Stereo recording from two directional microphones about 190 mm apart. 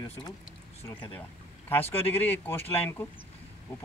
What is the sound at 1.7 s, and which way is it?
Speech, 10° left (ahead or behind).